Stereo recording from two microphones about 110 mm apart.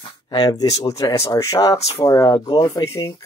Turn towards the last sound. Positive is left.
turn(degrees=45)  # may be behind; listen again after turning